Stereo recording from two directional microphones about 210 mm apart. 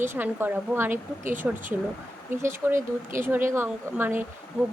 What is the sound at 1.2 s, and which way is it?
Speech, 35° right (ahead or behind).